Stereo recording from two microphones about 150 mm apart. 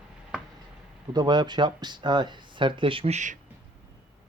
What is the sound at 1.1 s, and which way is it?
Speech, 30° right (ahead or behind).